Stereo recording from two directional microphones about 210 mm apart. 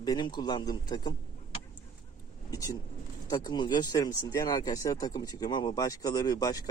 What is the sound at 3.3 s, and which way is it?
Speech, 20° left (ahead or behind).